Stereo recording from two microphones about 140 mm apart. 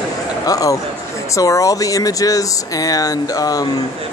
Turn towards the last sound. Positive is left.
turn(degrees=25)  # may be behind; listen again after turning